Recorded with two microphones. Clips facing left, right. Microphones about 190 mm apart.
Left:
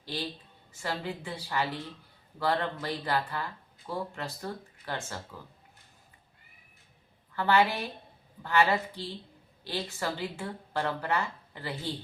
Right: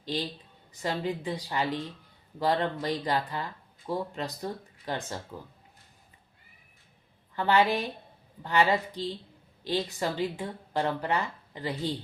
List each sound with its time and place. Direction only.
0.0 s a woman's voice: 15° right (ahead or behind)
7.3 s speech: 15° right (ahead or behind)